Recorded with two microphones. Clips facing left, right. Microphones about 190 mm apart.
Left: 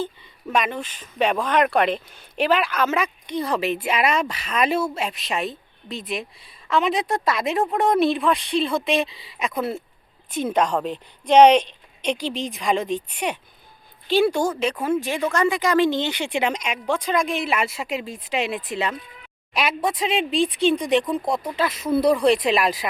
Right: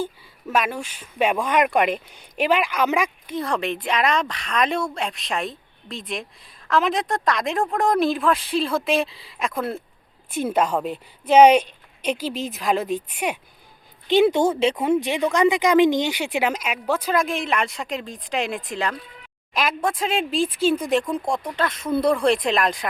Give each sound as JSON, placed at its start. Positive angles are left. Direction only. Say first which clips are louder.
{"t": 0.0, "sound": "speech", "louder": "even", "side_deg": -5}
{"t": 3.3, "sound": "speech", "louder": "left 2 dB", "side_deg": 0}
{"t": 14.1, "sound": "speech", "louder": "right 2 dB", "side_deg": -20}